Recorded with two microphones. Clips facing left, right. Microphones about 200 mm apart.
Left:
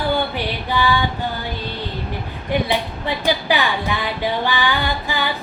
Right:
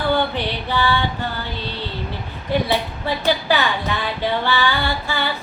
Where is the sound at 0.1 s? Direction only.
15° left (ahead or behind).